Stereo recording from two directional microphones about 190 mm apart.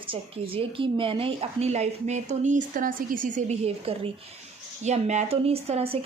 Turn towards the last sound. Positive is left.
turn(degrees=-30)  # may be behind; listen again after turning